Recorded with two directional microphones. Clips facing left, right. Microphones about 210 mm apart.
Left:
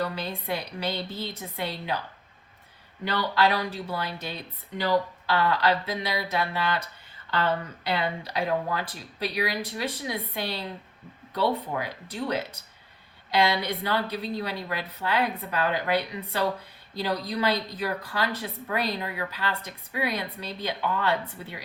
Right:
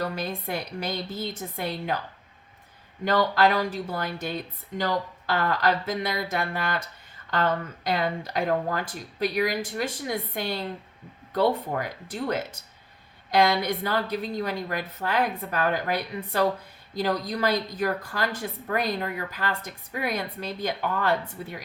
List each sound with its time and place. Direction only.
0.0 s a woman's voice: 45° right (ahead or behind)
3.0 s a woman's voice: 45° right (ahead or behind)